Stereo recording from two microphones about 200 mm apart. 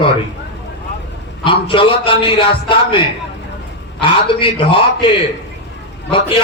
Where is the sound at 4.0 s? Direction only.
25° left (ahead or behind).